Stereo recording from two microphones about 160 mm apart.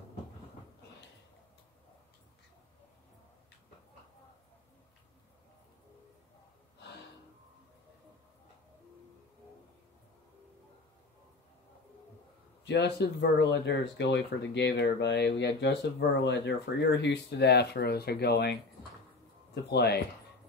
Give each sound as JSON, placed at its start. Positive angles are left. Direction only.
{"t": 12.6, "sound": "speech", "side_deg": 90}